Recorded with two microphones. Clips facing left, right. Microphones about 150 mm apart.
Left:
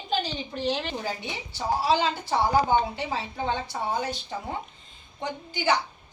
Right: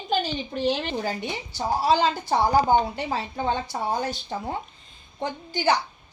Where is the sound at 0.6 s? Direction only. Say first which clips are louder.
Right 3 dB; 45° right (ahead or behind).